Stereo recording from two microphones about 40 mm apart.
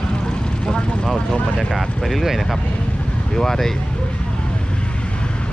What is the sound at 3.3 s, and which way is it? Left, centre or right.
Speech, centre.